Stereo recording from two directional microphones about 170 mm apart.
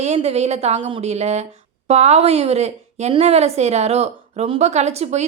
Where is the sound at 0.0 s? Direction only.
40° right (ahead or behind).